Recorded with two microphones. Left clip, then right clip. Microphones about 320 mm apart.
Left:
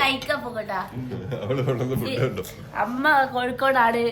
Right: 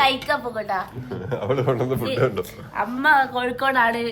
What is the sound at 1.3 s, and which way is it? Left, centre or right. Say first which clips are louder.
Speech: right 4 dB; right.